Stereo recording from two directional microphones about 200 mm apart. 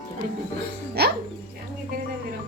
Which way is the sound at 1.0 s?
55° right (ahead or behind).